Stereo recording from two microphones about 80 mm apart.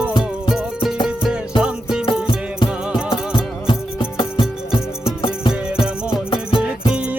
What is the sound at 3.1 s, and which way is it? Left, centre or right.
Music, left.